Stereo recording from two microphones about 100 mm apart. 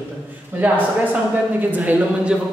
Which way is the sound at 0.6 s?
15° right (ahead or behind).